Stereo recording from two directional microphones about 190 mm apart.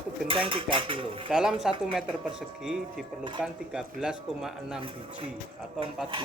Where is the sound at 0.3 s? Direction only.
25° right (ahead or behind).